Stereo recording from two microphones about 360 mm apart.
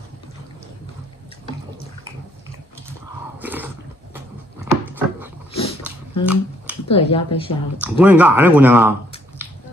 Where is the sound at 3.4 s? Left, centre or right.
Centre.